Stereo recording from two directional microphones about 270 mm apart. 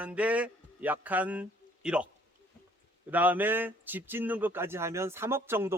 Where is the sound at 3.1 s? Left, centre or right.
Centre.